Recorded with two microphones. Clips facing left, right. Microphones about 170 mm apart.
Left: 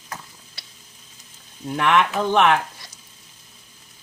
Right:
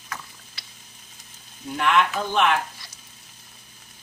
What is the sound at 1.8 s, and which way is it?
Speech, 65° left (ahead or behind).